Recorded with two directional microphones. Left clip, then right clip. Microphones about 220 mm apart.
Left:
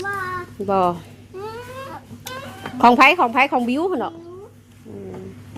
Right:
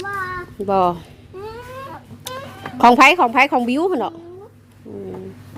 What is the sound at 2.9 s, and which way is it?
A woman's voice, 25° right (ahead or behind).